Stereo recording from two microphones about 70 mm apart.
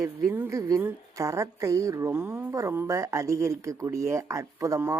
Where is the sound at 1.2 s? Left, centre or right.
Right.